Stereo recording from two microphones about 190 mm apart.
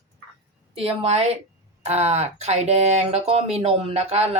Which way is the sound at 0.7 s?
30° right (ahead or behind).